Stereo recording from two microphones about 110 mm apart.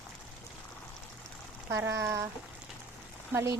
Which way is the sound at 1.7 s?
30° right (ahead or behind).